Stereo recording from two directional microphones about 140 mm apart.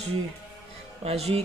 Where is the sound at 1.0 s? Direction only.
50° right (ahead or behind).